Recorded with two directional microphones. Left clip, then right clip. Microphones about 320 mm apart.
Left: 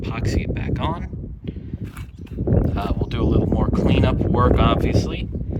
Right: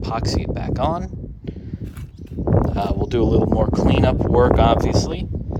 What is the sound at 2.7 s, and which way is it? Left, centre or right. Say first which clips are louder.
Speech: right 5 dB; right.